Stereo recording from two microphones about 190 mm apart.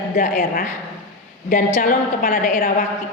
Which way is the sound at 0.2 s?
45° left (ahead or behind).